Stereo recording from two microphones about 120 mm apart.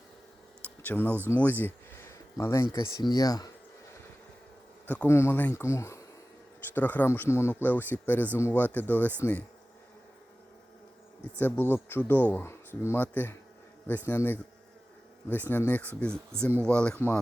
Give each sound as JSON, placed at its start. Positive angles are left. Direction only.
{"t": 0.9, "sound": "speech", "side_deg": 15}
{"t": 2.7, "sound": "speech", "side_deg": 35}
{"t": 4.9, "sound": "speech", "side_deg": 20}
{"t": 11.3, "sound": "speech", "side_deg": 15}